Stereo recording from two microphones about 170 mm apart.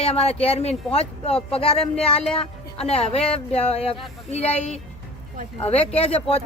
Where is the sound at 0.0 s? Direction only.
35° left (ahead or behind).